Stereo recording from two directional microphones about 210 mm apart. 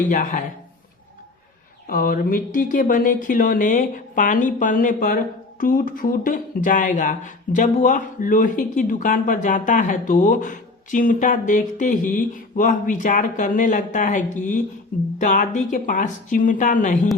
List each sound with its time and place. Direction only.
0.1 s speech: 40° left (ahead or behind)
1.9 s speech: 40° left (ahead or behind)